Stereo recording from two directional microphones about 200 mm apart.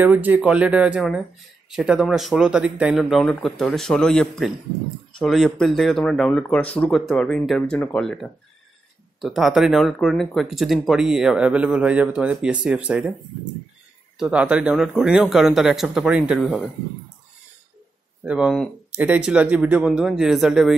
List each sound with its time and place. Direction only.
0.0 s speech: 10° right (ahead or behind)
14.1 s speech: 5° right (ahead or behind)
18.2 s speech: 5° right (ahead or behind)